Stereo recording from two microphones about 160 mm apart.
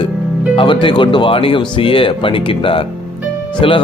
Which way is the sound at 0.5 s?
30° left (ahead or behind).